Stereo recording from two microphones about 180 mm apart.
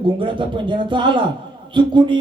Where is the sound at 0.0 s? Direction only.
25° right (ahead or behind).